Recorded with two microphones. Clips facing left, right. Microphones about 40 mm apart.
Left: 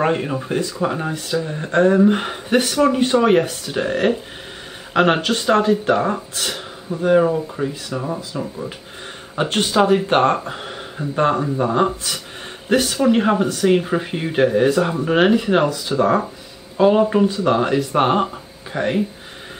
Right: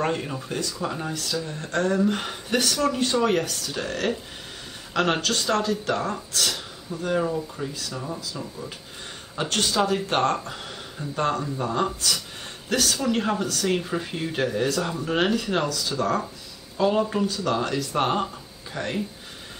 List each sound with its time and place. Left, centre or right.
0.0 s speech: left